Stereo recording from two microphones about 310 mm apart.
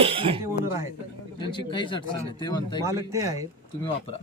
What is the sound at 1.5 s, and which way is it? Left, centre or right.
A man's voice, centre.